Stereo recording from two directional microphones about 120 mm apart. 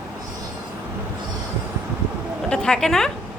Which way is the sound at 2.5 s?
5° left (ahead or behind).